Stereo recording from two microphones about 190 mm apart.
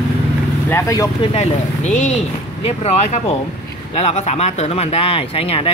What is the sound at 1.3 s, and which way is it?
Speech, 35° left (ahead or behind).